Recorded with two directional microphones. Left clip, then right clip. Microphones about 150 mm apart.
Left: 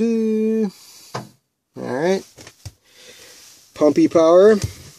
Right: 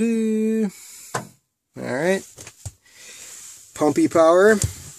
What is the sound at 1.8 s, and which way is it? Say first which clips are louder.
Speech: left 2 dB; 5° left (ahead or behind).